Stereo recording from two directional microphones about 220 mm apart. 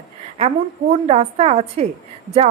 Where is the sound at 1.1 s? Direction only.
30° right (ahead or behind).